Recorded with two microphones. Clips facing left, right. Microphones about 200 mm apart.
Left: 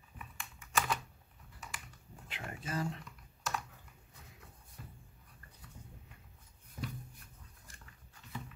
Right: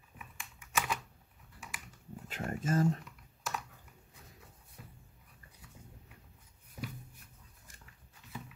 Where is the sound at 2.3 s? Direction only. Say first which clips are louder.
Right 8 dB; 45° right (ahead or behind).